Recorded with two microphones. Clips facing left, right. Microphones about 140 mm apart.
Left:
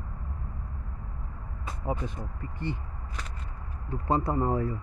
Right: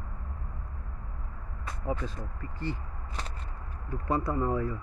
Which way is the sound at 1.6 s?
15° left (ahead or behind).